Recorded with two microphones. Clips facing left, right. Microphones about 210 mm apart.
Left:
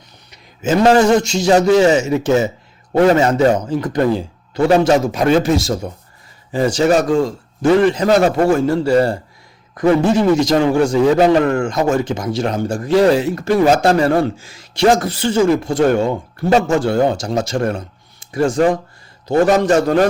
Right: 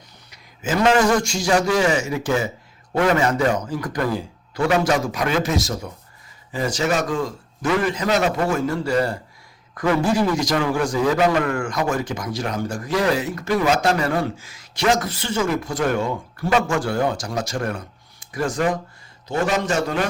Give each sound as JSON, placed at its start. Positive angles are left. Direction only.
{"t": 0.3, "sound": "a sound", "side_deg": 25}
{"t": 0.9, "sound": "a man's voice", "side_deg": 25}
{"t": 8.0, "sound": "a man's voice", "side_deg": 45}
{"t": 8.4, "sound": "a man's voice", "side_deg": 30}